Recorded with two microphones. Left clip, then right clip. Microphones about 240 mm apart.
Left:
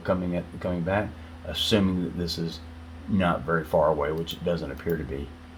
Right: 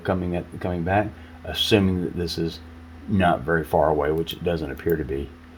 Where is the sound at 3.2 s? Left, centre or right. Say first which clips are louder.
Right 5 dB; right.